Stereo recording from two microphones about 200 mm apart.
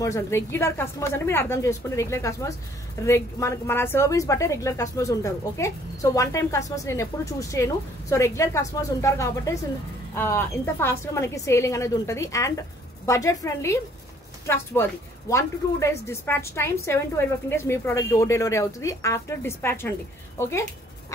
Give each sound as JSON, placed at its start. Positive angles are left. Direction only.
{"t": 0.0, "sound": "speech", "side_deg": 15}